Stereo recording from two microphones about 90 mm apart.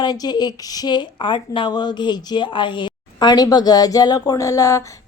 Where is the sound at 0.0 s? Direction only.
50° left (ahead or behind).